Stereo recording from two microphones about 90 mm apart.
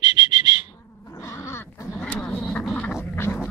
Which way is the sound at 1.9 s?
20° left (ahead or behind).